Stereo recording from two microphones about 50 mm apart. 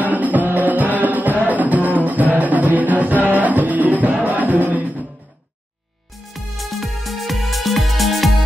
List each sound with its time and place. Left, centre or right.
0.0 s music: right
6.3 s music: centre